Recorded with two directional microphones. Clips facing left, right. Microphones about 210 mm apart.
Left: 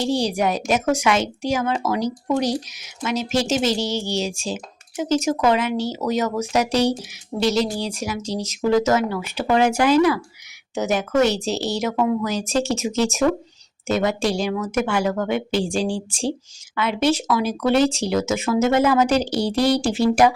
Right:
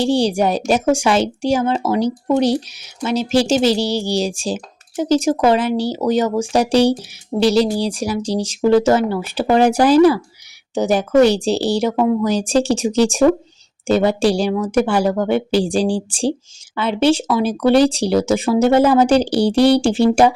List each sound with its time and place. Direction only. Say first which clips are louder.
0.0 s a woman's voice: right 5 dB; 30° right (ahead or behind)